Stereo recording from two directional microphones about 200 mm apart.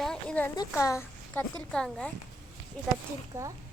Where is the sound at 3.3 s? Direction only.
15° right (ahead or behind).